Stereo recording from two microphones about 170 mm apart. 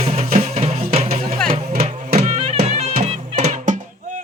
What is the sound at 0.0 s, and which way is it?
Music, 35° right (ahead or behind).